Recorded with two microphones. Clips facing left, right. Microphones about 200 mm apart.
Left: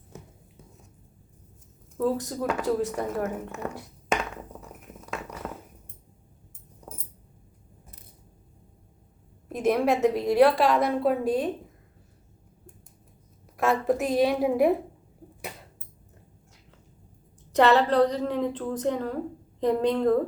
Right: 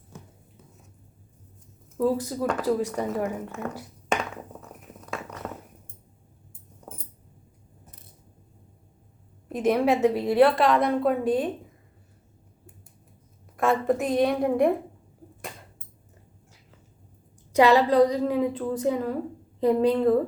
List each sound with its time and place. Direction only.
2.0 s a woman's voice: 5° right (ahead or behind)
4.6 s a sound: centre (ahead or behind)
9.5 s a woman's voice: centre (ahead or behind)
13.6 s a woman's voice: centre (ahead or behind)
17.5 s a woman's voice: 10° right (ahead or behind)